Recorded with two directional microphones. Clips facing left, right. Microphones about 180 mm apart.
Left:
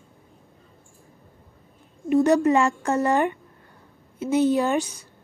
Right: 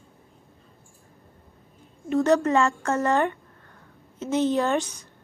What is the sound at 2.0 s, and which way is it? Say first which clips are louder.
A woman's voice: left 3 dB; 15° left (ahead or behind).